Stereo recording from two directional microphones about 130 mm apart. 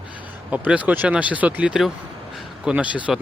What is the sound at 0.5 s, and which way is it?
Speech, 10° right (ahead or behind).